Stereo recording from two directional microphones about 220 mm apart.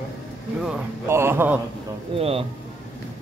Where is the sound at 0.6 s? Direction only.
5° right (ahead or behind).